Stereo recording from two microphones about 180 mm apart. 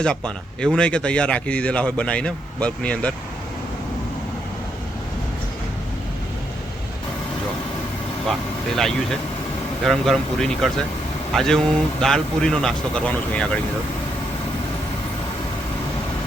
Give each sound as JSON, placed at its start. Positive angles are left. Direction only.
{"t": 0.6, "sound": "speech", "side_deg": 5}
{"t": 8.3, "sound": "speech", "side_deg": 0}